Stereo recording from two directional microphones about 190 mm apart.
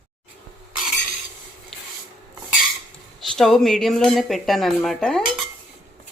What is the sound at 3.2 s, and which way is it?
Cutlery, centre (ahead or behind).